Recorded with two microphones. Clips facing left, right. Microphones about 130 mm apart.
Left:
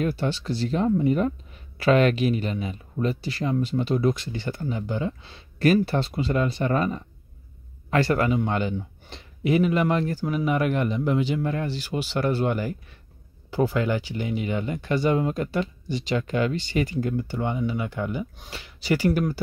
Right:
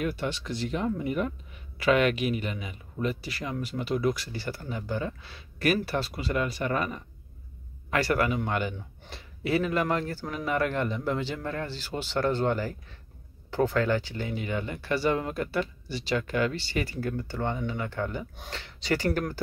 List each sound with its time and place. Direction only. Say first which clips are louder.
0.0 s a man's voice: left 5 dB; 30° left (ahead or behind); by 19.3 s 10° left (ahead or behind)